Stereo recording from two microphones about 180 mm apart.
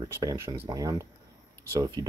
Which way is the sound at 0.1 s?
15° right (ahead or behind).